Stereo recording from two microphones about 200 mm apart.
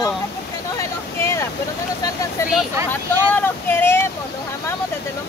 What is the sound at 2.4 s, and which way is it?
Speech, 15° left (ahead or behind).